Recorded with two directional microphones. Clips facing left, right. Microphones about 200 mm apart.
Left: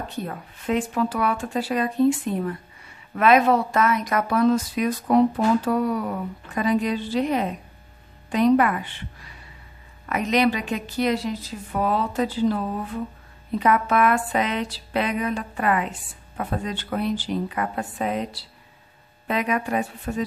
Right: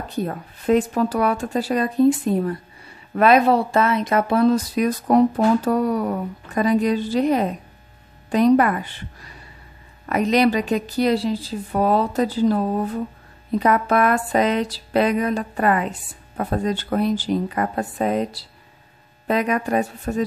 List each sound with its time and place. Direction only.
0.1 s a woman's voice: 40° right (ahead or behind)